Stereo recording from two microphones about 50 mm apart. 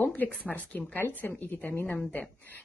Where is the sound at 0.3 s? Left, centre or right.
Left.